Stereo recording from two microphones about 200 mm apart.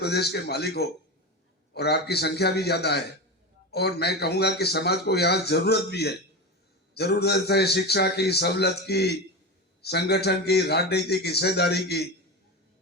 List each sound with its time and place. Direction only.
0.0 s a man's voice: 55° left (ahead or behind)